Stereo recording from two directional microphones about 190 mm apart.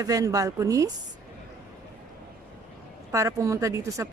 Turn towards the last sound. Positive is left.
turn(degrees=-15)  # may be behind; listen again after turning